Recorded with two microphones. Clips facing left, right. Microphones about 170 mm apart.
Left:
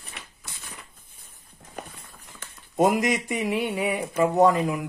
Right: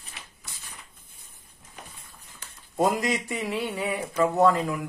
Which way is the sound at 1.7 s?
60° left (ahead or behind).